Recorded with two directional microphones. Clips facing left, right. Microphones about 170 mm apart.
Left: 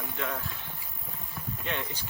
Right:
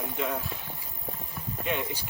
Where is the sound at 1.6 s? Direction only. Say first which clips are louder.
Right 5 dB; 15° right (ahead or behind).